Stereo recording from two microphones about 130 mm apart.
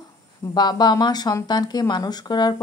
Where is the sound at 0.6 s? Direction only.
35° left (ahead or behind).